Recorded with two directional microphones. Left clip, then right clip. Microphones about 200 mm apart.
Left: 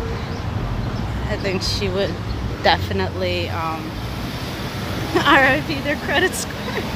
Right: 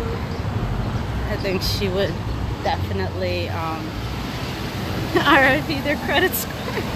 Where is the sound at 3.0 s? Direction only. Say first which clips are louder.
Left 2 dB; 10° left (ahead or behind).